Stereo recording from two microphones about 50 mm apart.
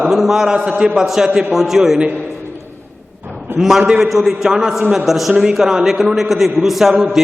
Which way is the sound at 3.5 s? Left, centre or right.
Centre.